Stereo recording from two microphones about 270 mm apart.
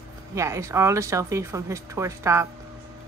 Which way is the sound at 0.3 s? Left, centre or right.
Centre.